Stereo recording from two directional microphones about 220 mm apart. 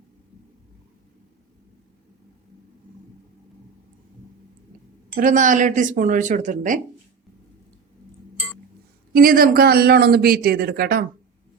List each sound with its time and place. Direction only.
5.1 s speech: 35° right (ahead or behind)
9.1 s a man's voice: 40° right (ahead or behind)